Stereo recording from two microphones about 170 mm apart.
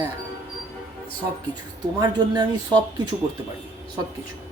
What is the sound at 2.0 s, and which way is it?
Speech, 25° right (ahead or behind).